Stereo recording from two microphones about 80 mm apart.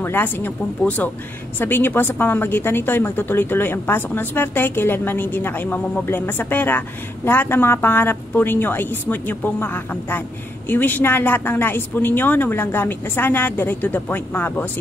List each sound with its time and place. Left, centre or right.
0.0 s a woman's voice: left